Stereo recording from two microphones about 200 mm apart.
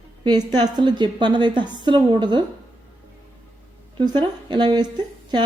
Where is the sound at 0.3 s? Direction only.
20° right (ahead or behind).